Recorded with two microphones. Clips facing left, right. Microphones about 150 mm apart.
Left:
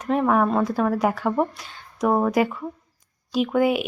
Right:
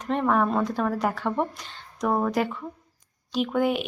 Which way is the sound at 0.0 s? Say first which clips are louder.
Left 3 dB; 5° left (ahead or behind).